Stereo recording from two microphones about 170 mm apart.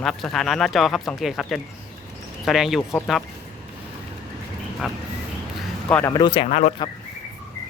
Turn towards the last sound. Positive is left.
turn(degrees=40)  # may be behind; listen again after turning